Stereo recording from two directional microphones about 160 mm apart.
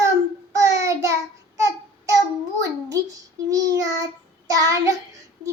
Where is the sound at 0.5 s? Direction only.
20° right (ahead or behind).